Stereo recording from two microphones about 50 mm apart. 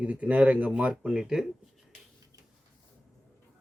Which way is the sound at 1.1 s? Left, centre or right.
Centre.